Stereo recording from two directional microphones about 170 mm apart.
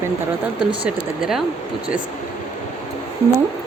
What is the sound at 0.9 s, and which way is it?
Speech, 5° right (ahead or behind).